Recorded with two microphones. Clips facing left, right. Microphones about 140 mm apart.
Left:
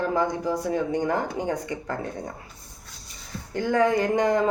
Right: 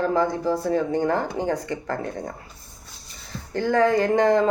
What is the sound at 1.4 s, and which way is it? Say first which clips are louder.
Speech: right 3 dB; 35° right (ahead or behind).